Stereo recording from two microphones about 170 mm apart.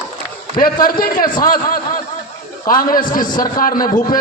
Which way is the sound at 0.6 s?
60° left (ahead or behind).